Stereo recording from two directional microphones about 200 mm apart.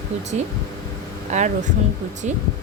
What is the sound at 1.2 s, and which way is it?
Speech, 35° right (ahead or behind).